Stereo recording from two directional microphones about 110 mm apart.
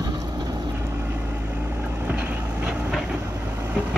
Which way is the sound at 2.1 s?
10° right (ahead or behind).